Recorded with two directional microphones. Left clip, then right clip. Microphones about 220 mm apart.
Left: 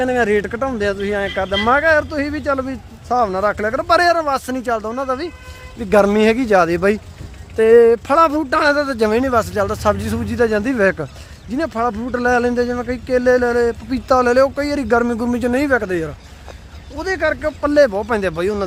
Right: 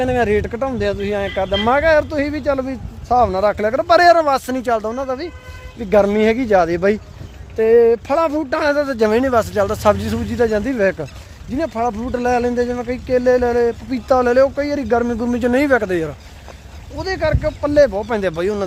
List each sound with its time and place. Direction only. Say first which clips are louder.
0.0 s speech: even; 5° right (ahead or behind)
5.0 s speech: left 2 dB; 5° left (ahead or behind); by 16.1 s 10° right (ahead or behind)
17.0 s speech: left 1 dB; 5° left (ahead or behind)